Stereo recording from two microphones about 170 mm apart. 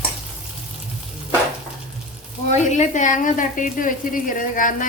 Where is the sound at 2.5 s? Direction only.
45° left (ahead or behind).